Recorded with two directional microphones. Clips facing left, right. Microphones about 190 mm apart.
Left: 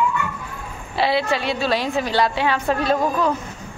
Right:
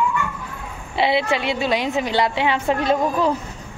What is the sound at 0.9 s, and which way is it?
A woman's voice, 20° right (ahead or behind).